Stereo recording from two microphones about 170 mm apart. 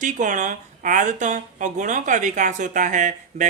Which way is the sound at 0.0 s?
50° right (ahead or behind).